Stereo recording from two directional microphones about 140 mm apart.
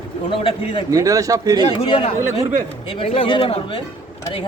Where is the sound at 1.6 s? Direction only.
40° left (ahead or behind).